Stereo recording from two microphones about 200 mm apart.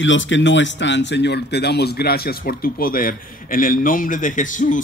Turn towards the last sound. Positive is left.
turn(degrees=40)  # may be behind; listen again after turning